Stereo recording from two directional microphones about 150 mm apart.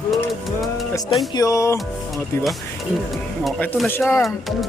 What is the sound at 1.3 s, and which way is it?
Speech, 20° left (ahead or behind).